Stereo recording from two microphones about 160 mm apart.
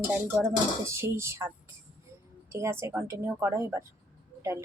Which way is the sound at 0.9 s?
15° right (ahead or behind).